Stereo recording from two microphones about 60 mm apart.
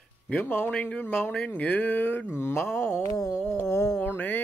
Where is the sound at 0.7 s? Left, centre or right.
Left.